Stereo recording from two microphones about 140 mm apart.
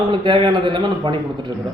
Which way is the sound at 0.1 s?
35° right (ahead or behind).